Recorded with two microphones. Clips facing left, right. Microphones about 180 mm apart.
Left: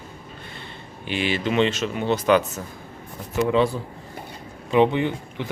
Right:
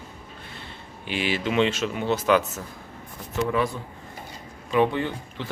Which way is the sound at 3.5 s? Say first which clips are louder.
Left 5 dB; 25° left (ahead or behind).